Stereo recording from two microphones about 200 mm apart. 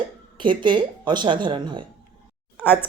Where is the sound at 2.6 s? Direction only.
10° left (ahead or behind).